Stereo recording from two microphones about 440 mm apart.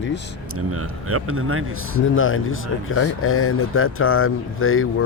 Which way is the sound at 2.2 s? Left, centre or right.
Left.